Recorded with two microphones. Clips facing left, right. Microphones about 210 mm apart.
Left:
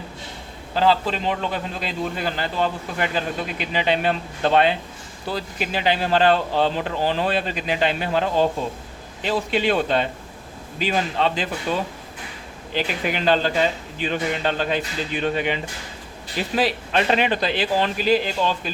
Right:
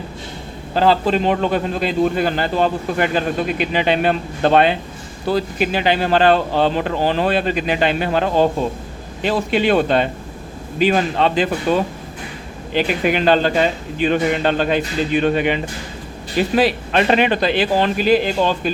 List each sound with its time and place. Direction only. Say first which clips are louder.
0.7 s a man's voice: right 4 dB; 50° right (ahead or behind)